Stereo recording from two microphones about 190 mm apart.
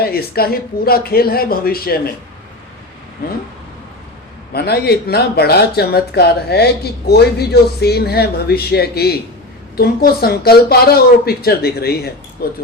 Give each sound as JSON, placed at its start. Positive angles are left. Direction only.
{"t": 0.0, "sound": "speech", "side_deg": 55}
{"t": 4.5, "sound": "speech", "side_deg": 55}